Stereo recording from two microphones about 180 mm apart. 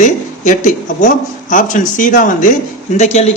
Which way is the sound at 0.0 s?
45° left (ahead or behind).